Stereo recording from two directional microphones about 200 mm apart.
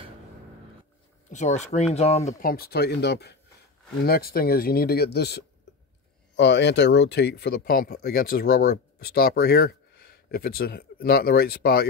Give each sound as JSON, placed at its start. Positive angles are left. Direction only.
{"t": 1.3, "sound": "speech", "side_deg": 35}
{"t": 2.4, "sound": "speech", "side_deg": 50}